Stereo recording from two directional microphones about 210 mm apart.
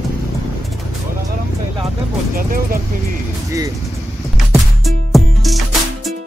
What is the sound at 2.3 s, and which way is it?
Speech, 40° right (ahead or behind).